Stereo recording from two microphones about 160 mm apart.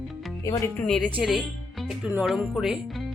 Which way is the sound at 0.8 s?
5° left (ahead or behind).